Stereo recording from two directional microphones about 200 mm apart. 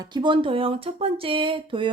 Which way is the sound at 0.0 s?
20° right (ahead or behind).